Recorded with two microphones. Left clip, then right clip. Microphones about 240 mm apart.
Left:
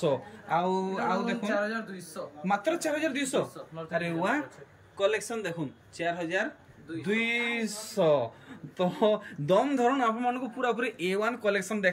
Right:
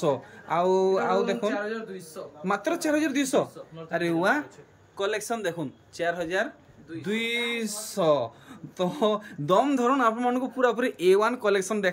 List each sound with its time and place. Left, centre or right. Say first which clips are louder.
0.0 s speech: right 2 dB; centre